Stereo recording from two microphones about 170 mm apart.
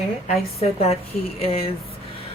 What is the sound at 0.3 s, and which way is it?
Speech, 35° left (ahead or behind).